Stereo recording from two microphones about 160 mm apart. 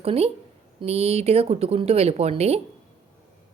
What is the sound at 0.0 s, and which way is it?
A woman's voice, 40° right (ahead or behind).